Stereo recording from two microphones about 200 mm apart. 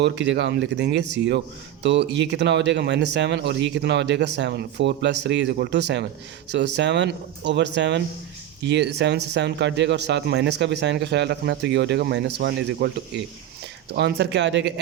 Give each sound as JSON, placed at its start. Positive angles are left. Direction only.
{"t": 0.0, "sound": "speech", "side_deg": -60}
{"t": 13.9, "sound": "speech", "side_deg": -55}